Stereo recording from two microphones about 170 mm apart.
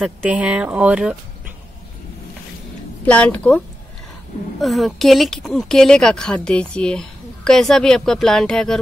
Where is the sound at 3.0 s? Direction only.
10° left (ahead or behind).